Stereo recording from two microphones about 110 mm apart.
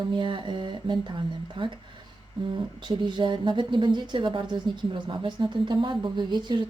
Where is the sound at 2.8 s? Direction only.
45° right (ahead or behind).